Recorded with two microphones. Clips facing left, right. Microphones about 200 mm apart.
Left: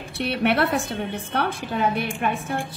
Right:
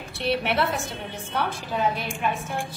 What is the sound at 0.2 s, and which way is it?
A woman's voice, 60° left (ahead or behind).